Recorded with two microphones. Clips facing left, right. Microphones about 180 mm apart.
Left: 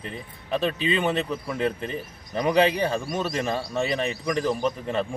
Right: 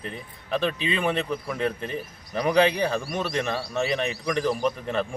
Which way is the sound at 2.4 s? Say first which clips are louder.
Even; centre (ahead or behind).